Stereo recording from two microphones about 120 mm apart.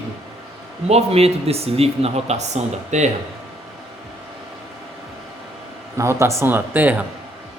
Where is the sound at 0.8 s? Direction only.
60° right (ahead or behind).